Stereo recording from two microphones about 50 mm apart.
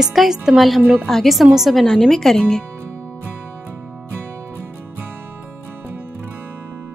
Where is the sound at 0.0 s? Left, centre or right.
Centre.